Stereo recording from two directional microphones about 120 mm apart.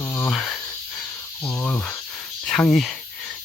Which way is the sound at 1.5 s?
15° left (ahead or behind).